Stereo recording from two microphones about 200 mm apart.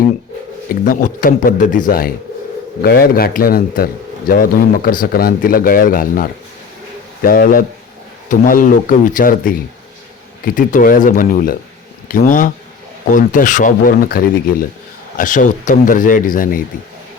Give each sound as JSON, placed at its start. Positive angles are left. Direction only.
{"t": 0.7, "sound": "speech", "side_deg": 45}
{"t": 10.4, "sound": "speech", "side_deg": 40}